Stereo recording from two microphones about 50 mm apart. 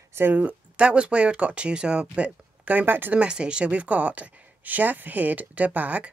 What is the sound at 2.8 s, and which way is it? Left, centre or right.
Speech, right.